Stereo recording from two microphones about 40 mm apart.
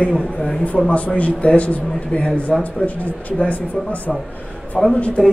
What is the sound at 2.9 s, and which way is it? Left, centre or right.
A man's voice, left.